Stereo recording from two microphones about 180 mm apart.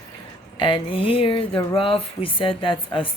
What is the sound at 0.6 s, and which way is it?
Speech, 30° left (ahead or behind).